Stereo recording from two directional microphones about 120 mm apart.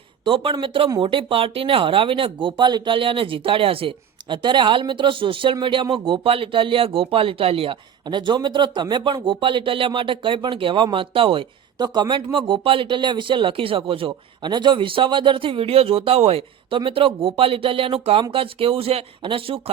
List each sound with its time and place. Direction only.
0.3 s speech: 50° right (ahead or behind)